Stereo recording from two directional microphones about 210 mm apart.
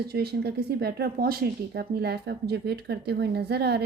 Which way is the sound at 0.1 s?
50° right (ahead or behind).